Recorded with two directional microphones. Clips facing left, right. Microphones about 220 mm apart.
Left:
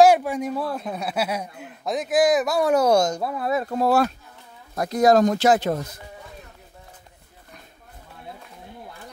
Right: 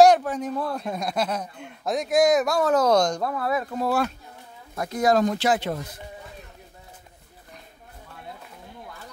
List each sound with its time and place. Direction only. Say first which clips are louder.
0.0 s speech: even; 10° left (ahead or behind)
3.3 s speech: left 2 dB; 20° left (ahead or behind)
3.7 s speech: left 4 dB; 40° left (ahead or behind)